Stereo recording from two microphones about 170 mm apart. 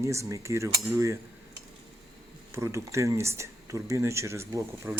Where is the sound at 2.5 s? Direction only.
15° right (ahead or behind).